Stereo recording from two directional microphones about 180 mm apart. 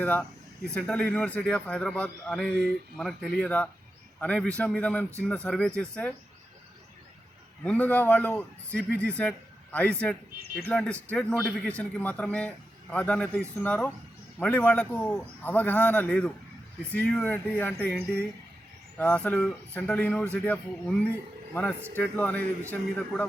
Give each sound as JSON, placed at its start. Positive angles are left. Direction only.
{"t": 0.0, "sound": "a man's voice", "side_deg": 10}
{"t": 7.6, "sound": "a man's voice", "side_deg": 10}
{"t": 10.4, "sound": "speech", "side_deg": -60}
{"t": 10.7, "sound": "a man's voice", "side_deg": 5}